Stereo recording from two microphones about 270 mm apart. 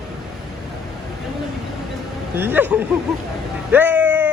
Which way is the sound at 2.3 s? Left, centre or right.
Centre.